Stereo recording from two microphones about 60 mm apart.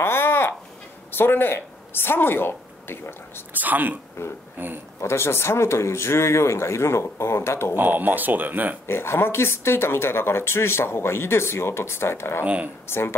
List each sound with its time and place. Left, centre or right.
0.0 s a sound: left
1.1 s a woman's voice: left
3.5 s speech: right
5.0 s speech: left
7.7 s speech: right
8.8 s speech: left
12.4 s speech: right
12.8 s speech: left